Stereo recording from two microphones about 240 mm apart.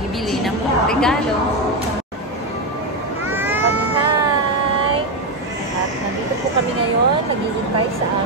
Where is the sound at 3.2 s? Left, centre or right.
Centre.